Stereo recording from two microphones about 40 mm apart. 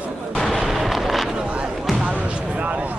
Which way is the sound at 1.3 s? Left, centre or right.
Right.